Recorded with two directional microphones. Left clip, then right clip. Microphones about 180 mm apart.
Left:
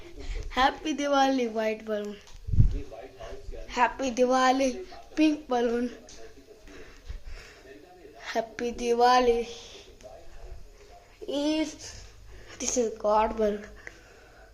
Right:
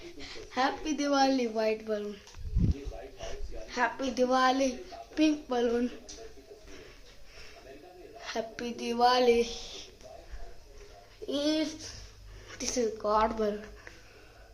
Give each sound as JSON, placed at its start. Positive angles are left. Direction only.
{"t": 0.5, "sound": "a woman's voice", "side_deg": 30}
{"t": 3.7, "sound": "a woman's voice", "side_deg": 25}
{"t": 8.2, "sound": "a woman's voice", "side_deg": 20}
{"t": 9.4, "sound": "speech", "side_deg": -20}
{"t": 11.3, "sound": "speech", "side_deg": 5}
{"t": 13.5, "sound": "a sound", "side_deg": 20}